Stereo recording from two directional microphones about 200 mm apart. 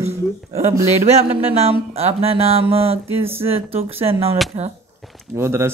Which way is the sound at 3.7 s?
30° right (ahead or behind).